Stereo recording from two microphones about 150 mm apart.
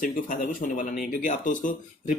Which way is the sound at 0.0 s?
60° left (ahead or behind).